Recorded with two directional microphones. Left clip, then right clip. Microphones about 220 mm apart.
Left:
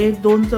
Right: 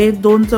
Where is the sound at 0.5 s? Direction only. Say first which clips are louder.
Right 5 dB; 55° right (ahead or behind).